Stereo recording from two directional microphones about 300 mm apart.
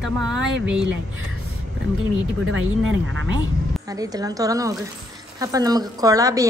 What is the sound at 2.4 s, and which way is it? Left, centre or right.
Speech, right.